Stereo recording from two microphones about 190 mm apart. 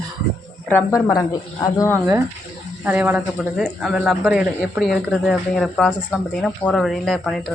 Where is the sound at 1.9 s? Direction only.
15° right (ahead or behind); by 7.4 s centre (ahead or behind).